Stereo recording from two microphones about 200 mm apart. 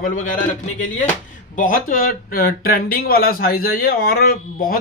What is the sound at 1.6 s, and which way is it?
Speech, 45° left (ahead or behind).